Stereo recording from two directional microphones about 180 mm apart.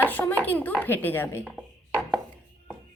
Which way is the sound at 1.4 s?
5° right (ahead or behind).